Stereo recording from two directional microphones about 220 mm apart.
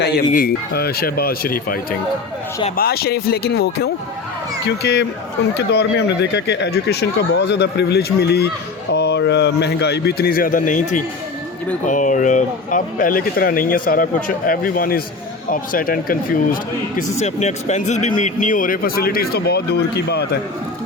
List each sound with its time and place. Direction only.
0.0 s speech: 40° left (ahead or behind)
17.0 s speech: 30° left (ahead or behind); by 20.4 s 50° left (ahead or behind)